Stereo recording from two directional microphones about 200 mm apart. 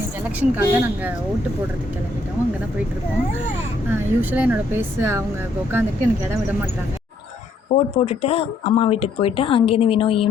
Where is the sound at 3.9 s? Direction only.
10° right (ahead or behind).